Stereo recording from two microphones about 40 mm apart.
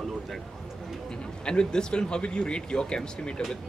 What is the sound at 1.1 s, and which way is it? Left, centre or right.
Speech, left.